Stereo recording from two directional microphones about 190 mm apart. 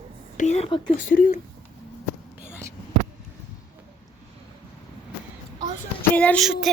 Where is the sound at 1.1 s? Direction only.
45° left (ahead or behind).